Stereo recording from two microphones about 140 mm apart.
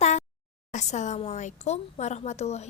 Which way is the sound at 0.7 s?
55° left (ahead or behind).